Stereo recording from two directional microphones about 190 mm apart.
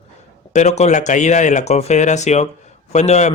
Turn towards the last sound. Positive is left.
turn(degrees=35)  # may be behind; listen again after turning